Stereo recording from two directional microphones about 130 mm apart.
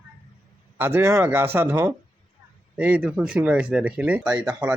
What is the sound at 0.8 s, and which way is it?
Speech, 20° right (ahead or behind).